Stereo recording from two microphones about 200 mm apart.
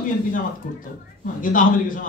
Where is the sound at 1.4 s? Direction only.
40° left (ahead or behind).